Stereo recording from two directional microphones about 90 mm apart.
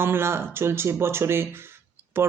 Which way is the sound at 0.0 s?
25° right (ahead or behind).